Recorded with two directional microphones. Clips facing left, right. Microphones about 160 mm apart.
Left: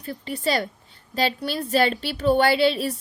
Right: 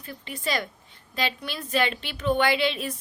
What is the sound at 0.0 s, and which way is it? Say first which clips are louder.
A woman's voice: left 6 dB; 35° left (ahead or behind).